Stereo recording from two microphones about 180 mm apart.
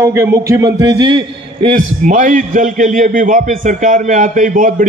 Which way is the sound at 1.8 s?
45° right (ahead or behind).